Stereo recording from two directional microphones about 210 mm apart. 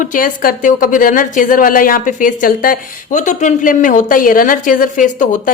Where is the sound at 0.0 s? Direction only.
40° left (ahead or behind).